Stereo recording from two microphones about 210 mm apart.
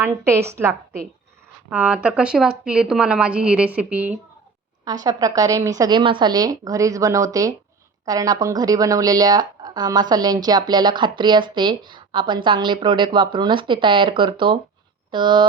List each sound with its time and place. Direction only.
0.0 s a woman's voice: 10° right (ahead or behind)